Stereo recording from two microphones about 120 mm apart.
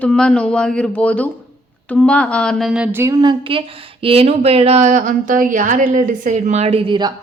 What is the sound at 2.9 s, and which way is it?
Speech, 20° right (ahead or behind).